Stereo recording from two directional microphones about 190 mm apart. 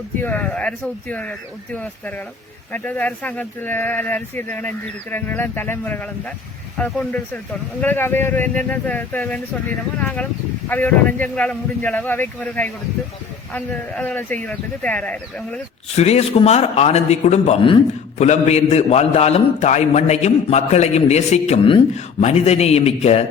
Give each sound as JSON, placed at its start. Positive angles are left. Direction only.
{"t": 0.2, "sound": "speech", "side_deg": 10}
{"t": 16.0, "sound": "a man's voice", "side_deg": 35}